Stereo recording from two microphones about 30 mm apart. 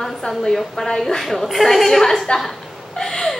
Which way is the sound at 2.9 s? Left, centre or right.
Centre.